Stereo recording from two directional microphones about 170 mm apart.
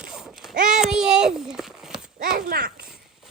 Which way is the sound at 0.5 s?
50° right (ahead or behind).